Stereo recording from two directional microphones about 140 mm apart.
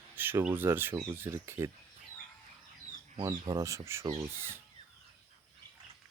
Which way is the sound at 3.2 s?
25° right (ahead or behind).